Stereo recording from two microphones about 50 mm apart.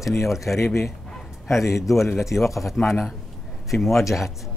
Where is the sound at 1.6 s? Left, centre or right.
Left.